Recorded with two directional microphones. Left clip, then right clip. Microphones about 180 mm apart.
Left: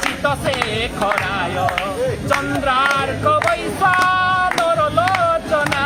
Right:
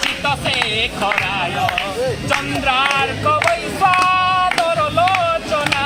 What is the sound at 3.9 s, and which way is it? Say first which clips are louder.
Female singing: right 1 dB; 25° right (ahead or behind).